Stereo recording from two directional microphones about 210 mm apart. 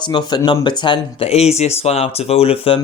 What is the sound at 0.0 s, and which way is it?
Speech, 20° left (ahead or behind).